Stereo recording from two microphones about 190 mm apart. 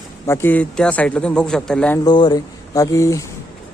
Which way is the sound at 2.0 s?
25° left (ahead or behind).